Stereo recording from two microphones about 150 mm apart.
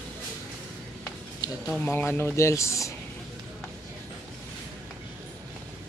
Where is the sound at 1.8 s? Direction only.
15° left (ahead or behind).